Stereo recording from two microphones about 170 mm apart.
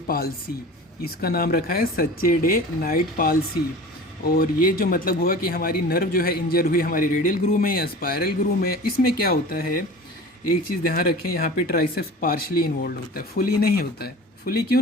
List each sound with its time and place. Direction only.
1.0 s a man's voice: 60° left (ahead or behind)
10.8 s a man's voice: 60° left (ahead or behind)